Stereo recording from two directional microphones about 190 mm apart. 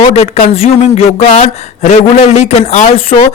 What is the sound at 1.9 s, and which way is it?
Speech, 35° left (ahead or behind).